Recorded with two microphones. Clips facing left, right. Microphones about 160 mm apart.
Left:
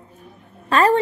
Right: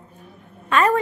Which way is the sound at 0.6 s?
35° left (ahead or behind).